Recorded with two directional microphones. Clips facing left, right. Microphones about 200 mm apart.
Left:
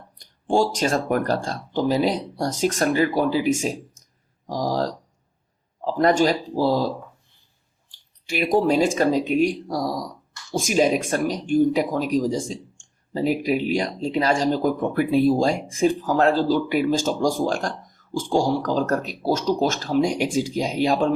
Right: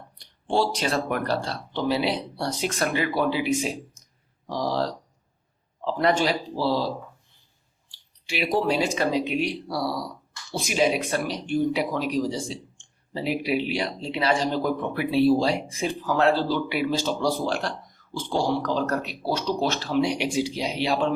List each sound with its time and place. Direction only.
0.2 s speech: 45° left (ahead or behind)
4.0 s clicking: 45° left (ahead or behind)
4.4 s speech: 45° left (ahead or behind)
7.9 s clicking: 45° left (ahead or behind)
8.6 s speech: 45° left (ahead or behind)